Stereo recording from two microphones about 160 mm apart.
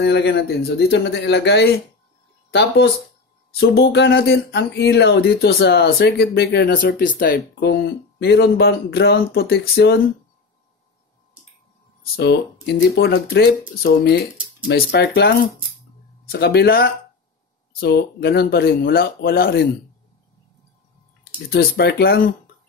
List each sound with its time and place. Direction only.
0.0 s speech: 85° left
3.6 s speech: 85° left
12.2 s speech: 90° left; by 16.9 s 75° left (ahead or behind)
17.7 s speech: 85° left
21.2 s speech: 75° left (ahead or behind)